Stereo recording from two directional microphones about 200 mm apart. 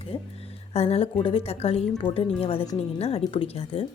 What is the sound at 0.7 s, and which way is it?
Speech, 30° left (ahead or behind).